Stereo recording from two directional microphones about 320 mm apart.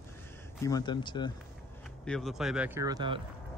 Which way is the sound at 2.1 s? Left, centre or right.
Centre.